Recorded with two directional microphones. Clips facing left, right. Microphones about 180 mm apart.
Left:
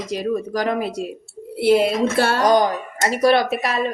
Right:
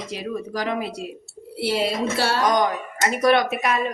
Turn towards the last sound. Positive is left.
turn(degrees=30)  # may be behind; listen again after turning